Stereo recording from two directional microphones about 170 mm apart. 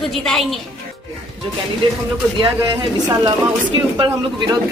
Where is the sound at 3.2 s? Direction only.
30° right (ahead or behind).